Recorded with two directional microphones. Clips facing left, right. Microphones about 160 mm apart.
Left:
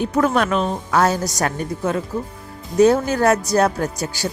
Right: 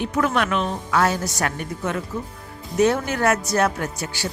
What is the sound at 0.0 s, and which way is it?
Speech, 40° left (ahead or behind).